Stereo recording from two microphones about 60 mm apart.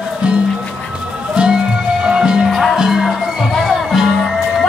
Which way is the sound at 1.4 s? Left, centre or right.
Right.